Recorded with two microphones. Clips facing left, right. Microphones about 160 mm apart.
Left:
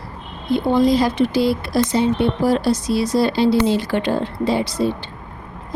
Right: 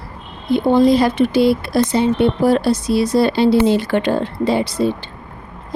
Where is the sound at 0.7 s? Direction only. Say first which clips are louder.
Right 3 dB; 60° right (ahead or behind).